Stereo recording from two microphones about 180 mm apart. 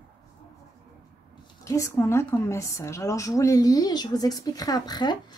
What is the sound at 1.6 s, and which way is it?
A woman's voice, 15° left (ahead or behind).